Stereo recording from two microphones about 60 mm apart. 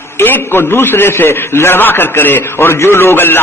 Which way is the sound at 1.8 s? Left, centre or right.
Left.